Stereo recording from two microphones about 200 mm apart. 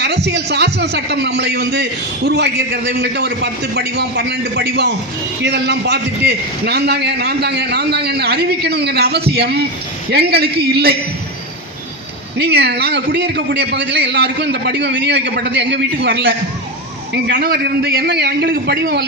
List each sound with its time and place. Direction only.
0.3 s a man's voice: 55° right (ahead or behind)
12.4 s a man's voice: 55° right (ahead or behind)